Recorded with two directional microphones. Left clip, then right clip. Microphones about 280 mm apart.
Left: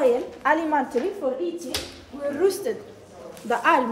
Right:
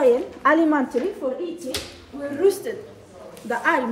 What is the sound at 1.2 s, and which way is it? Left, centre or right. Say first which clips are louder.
Speech: even; centre.